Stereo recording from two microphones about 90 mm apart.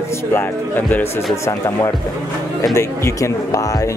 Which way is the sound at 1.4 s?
35° left (ahead or behind).